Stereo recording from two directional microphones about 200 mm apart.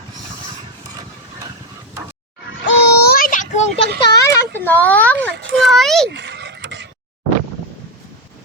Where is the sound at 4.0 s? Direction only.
15° left (ahead or behind).